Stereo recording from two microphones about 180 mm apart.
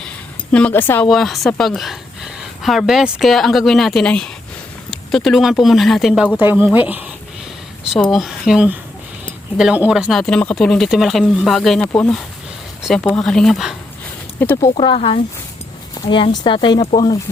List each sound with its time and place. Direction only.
0.5 s speech: 10° left (ahead or behind)
1.1 s speech: centre (ahead or behind)
8.1 s speech: centre (ahead or behind)
14.3 s speech: 15° left (ahead or behind)
14.8 s speech: 30° left (ahead or behind)